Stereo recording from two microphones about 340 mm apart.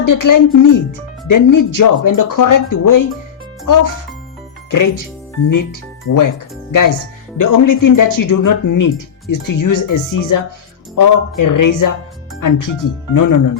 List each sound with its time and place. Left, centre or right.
0.0 s speech: left
6.1 s speech: left
7.3 s speech: left